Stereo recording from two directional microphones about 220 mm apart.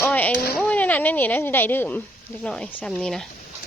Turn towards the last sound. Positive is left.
turn(degrees=0)  # may be behind; listen again after turning